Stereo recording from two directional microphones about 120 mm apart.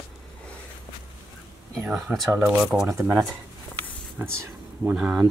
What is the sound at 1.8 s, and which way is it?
Speech, 10° right (ahead or behind).